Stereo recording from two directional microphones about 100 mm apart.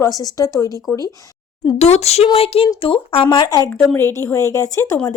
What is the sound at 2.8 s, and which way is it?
Speech, 60° left (ahead or behind).